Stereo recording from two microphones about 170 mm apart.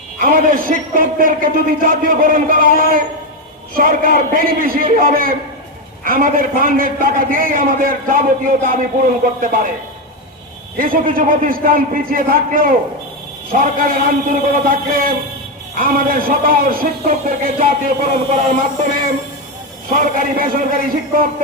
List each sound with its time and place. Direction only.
0.2 s a man's voice: 55° right (ahead or behind)
10.8 s a man's voice: 55° right (ahead or behind)
19.9 s a man's voice: 55° right (ahead or behind)